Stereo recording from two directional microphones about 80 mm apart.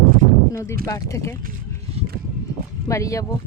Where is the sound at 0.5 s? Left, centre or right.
Left.